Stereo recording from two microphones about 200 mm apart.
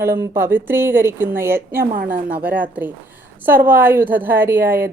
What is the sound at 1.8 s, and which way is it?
Speech, 45° right (ahead or behind).